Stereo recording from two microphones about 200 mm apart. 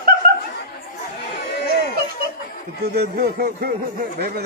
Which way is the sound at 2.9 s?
50° right (ahead or behind).